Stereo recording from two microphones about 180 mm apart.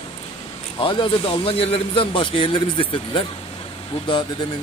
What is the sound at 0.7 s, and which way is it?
A man's voice, 30° left (ahead or behind).